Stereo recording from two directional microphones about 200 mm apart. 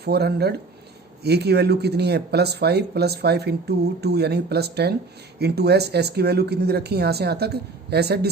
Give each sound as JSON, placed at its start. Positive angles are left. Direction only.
{"t": 0.0, "sound": "speech", "side_deg": -55}